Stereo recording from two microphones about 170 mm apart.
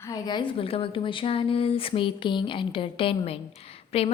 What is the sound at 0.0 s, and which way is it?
A woman's voice, 20° left (ahead or behind).